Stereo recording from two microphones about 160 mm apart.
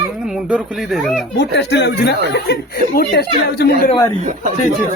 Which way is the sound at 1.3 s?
90° left.